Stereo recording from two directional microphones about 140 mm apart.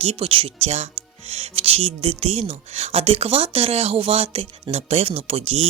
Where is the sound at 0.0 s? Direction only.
45° right (ahead or behind).